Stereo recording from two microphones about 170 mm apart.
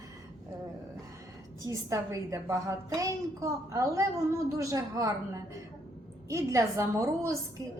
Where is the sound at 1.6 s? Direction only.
20° right (ahead or behind).